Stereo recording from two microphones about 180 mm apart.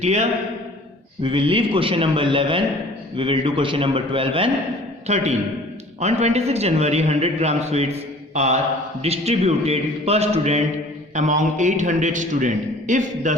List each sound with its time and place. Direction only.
0.0 s a man's voice: 40° right (ahead or behind)
1.2 s a man's voice: 30° right (ahead or behind)
8.3 s mantra: 40° right (ahead or behind)
9.0 s a man's voice: 35° right (ahead or behind)